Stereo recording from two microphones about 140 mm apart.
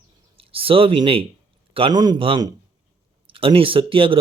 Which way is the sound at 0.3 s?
40° right (ahead or behind).